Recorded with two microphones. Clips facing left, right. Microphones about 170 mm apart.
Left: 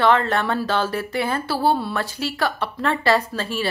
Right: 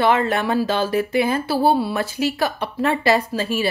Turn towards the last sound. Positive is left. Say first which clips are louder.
# right 2 dB
turn(degrees=-10)  # may be behind; listen again after turning